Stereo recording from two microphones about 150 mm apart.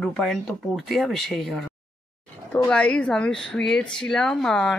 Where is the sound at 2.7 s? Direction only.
10° left (ahead or behind).